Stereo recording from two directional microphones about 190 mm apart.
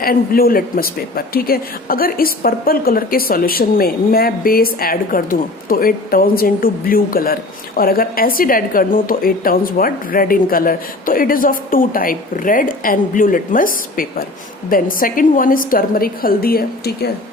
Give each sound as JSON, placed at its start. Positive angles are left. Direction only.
{"t": 0.0, "sound": "a woman's voice", "side_deg": 50}